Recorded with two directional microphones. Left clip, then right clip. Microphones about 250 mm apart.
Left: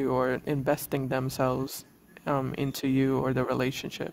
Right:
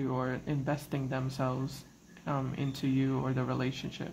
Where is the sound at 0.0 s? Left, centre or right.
Left.